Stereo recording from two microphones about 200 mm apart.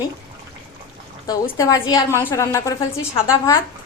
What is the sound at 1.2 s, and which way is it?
A woman's voice, 15° left (ahead or behind).